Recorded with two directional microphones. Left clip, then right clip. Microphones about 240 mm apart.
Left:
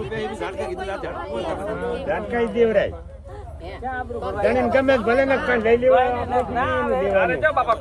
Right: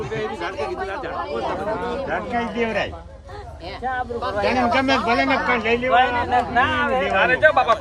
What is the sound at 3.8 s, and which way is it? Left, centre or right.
Speech, right.